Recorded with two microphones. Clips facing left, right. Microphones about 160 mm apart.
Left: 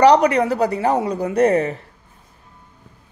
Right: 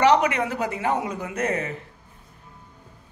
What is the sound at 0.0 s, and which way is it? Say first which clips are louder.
A woman's voice: left 6 dB; 35° left (ahead or behind).